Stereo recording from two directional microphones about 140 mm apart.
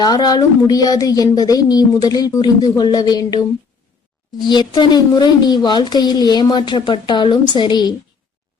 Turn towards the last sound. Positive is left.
turn(degrees=30)  # may be behind; listen again after turning